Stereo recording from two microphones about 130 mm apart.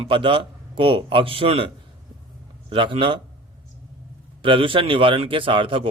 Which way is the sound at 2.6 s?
40° right (ahead or behind).